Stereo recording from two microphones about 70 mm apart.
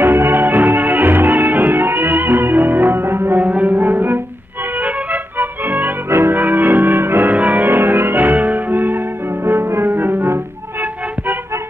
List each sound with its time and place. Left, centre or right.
0.0 s music: right